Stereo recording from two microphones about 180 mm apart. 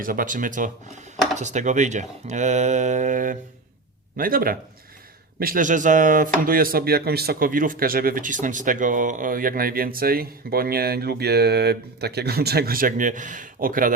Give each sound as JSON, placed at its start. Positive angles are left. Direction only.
{"t": 0.0, "sound": "speech", "side_deg": -50}